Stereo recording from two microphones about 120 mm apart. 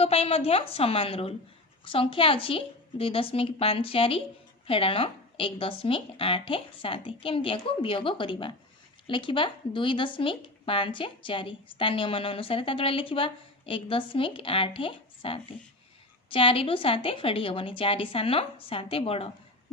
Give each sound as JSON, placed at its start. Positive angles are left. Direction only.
{"t": 0.0, "sound": "a woman's voice", "side_deg": 55}